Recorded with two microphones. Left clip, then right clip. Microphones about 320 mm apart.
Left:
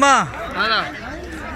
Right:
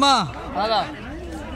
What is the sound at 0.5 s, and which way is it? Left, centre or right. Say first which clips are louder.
Speech: left 2 dB; right.